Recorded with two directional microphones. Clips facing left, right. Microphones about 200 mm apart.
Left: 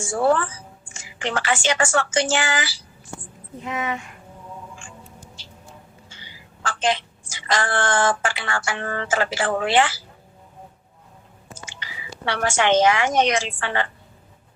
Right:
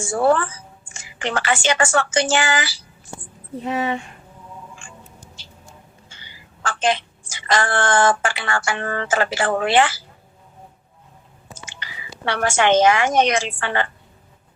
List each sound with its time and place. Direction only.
0.1 s speech: 60° right (ahead or behind)
3.6 s speech: 35° right (ahead or behind)
6.1 s a woman's voice: 55° right (ahead or behind)
11.8 s a woman's voice: 55° right (ahead or behind)